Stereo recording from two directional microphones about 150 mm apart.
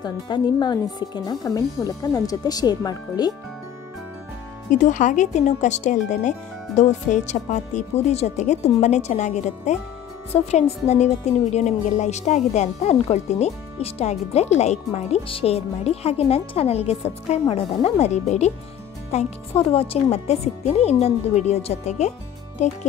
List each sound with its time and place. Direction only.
0.0 s speech: 30° left (ahead or behind)
4.7 s a woman's voice: 55° left (ahead or behind)